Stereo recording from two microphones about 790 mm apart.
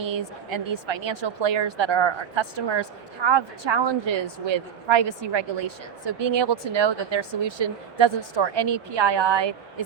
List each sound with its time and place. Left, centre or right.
0.0 s speech: right